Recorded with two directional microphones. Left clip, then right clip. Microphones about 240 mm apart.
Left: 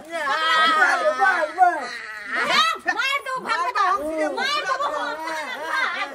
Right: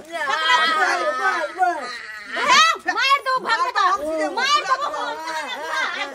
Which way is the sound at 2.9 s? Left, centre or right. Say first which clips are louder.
Right 5 dB; right.